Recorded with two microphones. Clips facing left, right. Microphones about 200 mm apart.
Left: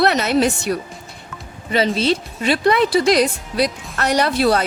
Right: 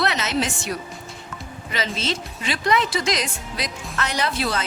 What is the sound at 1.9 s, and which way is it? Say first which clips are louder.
Speech: left 8 dB; 60° left (ahead or behind).